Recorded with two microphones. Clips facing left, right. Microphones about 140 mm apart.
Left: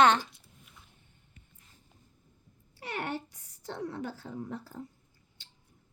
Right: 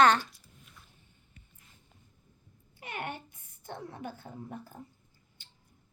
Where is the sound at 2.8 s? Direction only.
75° left (ahead or behind).